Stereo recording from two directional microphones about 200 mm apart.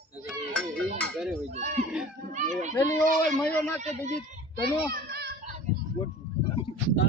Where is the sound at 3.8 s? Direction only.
35° right (ahead or behind).